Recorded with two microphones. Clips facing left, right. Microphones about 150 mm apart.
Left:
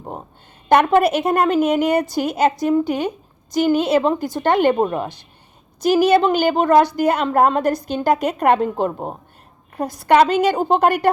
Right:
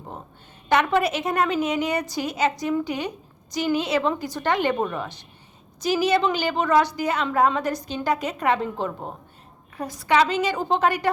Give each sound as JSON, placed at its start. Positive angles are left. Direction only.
{"t": 0.7, "sound": "a woman's voice", "side_deg": 50}
{"t": 4.7, "sound": "a woman's voice", "side_deg": 30}
{"t": 5.8, "sound": "a woman's voice", "side_deg": 55}
{"t": 8.9, "sound": "a woman's voice", "side_deg": 35}
{"t": 9.8, "sound": "a woman's voice", "side_deg": 60}